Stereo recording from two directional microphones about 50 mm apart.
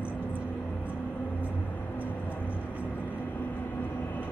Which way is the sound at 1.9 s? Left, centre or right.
Left.